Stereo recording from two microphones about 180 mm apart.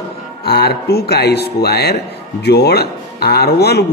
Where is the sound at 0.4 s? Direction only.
60° left (ahead or behind).